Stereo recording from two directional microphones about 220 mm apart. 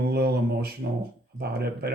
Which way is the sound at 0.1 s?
45° right (ahead or behind).